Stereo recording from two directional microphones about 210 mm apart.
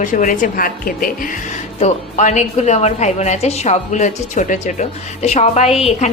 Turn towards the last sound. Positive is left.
turn(degrees=30)  # may be behind; listen again after turning